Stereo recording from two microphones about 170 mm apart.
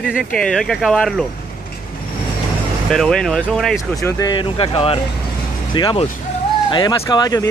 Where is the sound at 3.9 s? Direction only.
20° left (ahead or behind).